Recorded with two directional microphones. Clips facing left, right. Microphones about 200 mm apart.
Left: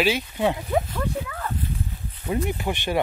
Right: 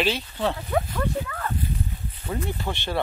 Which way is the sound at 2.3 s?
15° left (ahead or behind).